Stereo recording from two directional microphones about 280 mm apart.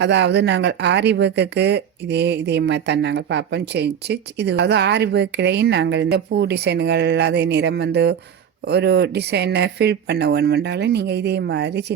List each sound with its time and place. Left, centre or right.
0.0 s speech: right